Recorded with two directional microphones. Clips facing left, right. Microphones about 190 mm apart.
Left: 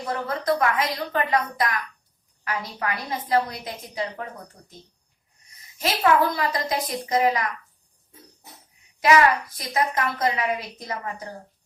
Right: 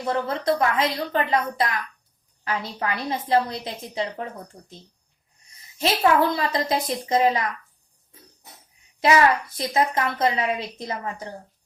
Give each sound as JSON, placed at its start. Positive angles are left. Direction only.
{"t": 0.1, "sound": "a woman's voice", "side_deg": -25}
{"t": 5.8, "sound": "a woman's voice", "side_deg": -25}
{"t": 9.0, "sound": "a woman's voice", "side_deg": -25}